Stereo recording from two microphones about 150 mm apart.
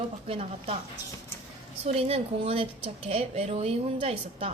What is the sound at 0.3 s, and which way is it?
Speech, 45° right (ahead or behind).